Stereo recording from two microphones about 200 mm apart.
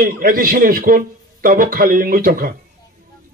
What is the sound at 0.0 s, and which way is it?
A man's voice, 45° right (ahead or behind).